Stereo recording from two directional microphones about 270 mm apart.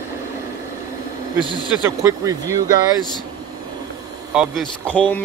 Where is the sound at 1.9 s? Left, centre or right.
Centre.